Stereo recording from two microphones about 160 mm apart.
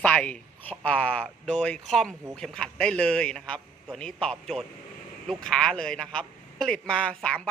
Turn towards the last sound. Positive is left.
turn(degrees=5)  # may be behind; listen again after turning